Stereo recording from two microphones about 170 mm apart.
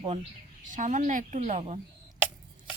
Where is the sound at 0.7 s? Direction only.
45° right (ahead or behind).